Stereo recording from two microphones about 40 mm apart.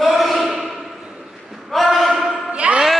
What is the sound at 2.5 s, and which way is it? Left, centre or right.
Music, right.